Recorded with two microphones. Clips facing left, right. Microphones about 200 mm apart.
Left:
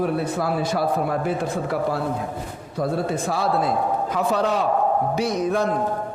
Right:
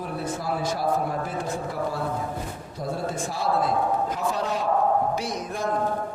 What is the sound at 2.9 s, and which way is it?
Speech, 65° left (ahead or behind).